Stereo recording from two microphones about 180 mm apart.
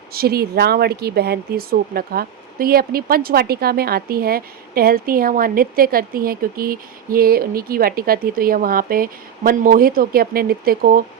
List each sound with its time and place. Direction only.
0.1 s speech: 60° right (ahead or behind)